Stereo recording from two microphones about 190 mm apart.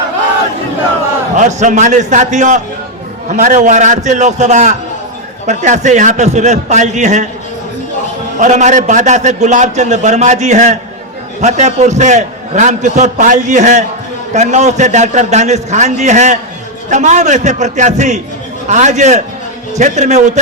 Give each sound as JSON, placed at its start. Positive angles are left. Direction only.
{"t": 1.4, "sound": "a man's voice", "side_deg": -40}
{"t": 8.4, "sound": "a man's voice", "side_deg": -40}